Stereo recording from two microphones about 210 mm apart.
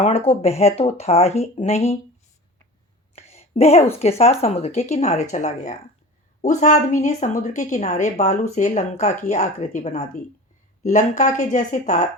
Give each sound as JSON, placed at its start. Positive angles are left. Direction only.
{"t": 0.0, "sound": "speech", "side_deg": 30}
{"t": 3.2, "sound": "a sound", "side_deg": 30}
{"t": 4.2, "sound": "speech", "side_deg": 30}